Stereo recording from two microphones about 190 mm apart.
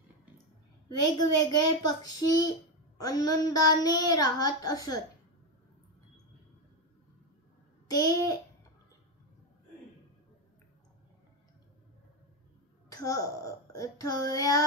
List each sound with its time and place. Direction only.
0.8 s child singing: 20° left (ahead or behind)
7.9 s child singing: 20° left (ahead or behind)
12.9 s speech: 15° left (ahead or behind)
13.7 s child singing: 15° left (ahead or behind)